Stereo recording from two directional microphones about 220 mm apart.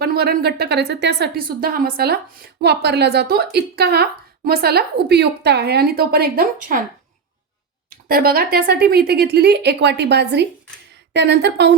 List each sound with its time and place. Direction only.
0.0 s a woman's voice: 45° right (ahead or behind)
7.9 s a woman's voice: 40° right (ahead or behind)